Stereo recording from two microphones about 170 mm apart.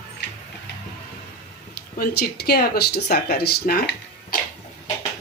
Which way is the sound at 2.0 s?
70° left (ahead or behind).